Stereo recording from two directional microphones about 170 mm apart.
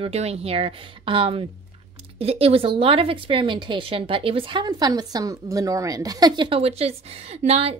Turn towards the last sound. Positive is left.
turn(degrees=-40)  # may be behind; listen again after turning